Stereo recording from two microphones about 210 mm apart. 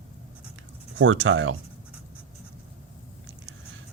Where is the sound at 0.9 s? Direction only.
65° right (ahead or behind).